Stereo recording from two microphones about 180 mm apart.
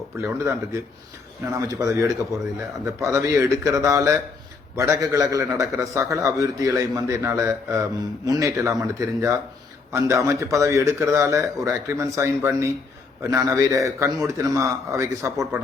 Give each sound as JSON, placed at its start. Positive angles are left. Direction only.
{"t": 0.2, "sound": "a man's voice", "side_deg": -15}